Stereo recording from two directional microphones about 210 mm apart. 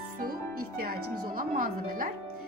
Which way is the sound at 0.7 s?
45° right (ahead or behind).